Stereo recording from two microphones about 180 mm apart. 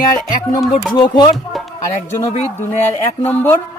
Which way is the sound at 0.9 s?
25° left (ahead or behind).